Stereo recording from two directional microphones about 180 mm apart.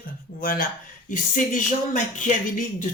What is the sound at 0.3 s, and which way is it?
Speech, 50° left (ahead or behind).